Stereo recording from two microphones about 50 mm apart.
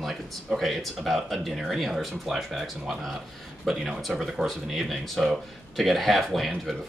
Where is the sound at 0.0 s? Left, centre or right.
Centre.